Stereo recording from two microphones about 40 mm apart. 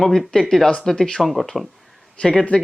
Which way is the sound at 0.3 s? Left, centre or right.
Centre.